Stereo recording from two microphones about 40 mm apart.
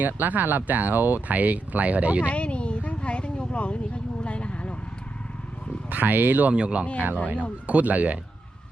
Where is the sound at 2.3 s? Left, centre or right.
Left.